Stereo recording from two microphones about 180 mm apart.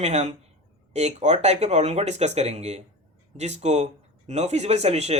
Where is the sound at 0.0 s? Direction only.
40° right (ahead or behind).